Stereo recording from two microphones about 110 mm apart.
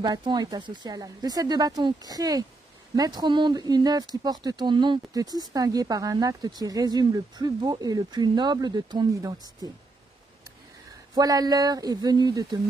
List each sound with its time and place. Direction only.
0.0 s speech: 40° right (ahead or behind)
11.1 s speech: 35° right (ahead or behind)